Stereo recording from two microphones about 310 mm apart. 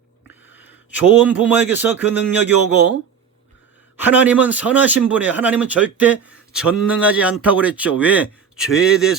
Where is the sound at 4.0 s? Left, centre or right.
Centre.